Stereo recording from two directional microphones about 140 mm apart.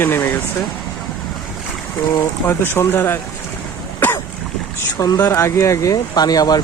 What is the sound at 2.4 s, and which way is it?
Speech, 15° left (ahead or behind).